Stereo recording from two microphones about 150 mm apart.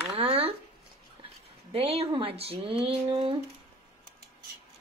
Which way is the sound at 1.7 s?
40° right (ahead or behind).